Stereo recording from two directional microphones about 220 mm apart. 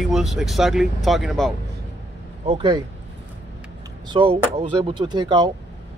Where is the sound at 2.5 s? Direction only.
25° right (ahead or behind).